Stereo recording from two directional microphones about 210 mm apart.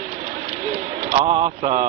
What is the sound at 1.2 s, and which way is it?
Speech, 30° right (ahead or behind).